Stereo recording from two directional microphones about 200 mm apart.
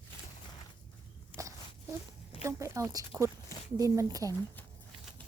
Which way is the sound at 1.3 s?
25° left (ahead or behind).